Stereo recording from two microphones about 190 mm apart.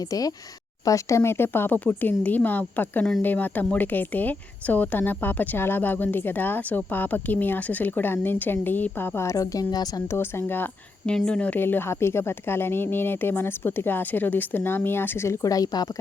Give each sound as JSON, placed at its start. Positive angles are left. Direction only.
{"t": 0.0, "sound": "speech", "side_deg": 20}